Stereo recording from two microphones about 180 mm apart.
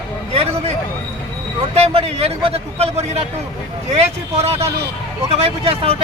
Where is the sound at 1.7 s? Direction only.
35° right (ahead or behind).